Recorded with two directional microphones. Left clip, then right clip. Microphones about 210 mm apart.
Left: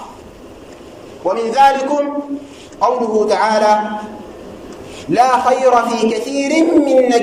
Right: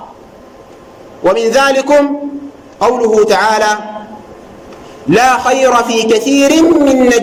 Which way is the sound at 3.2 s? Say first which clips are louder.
Right 2 dB; 45° right (ahead or behind).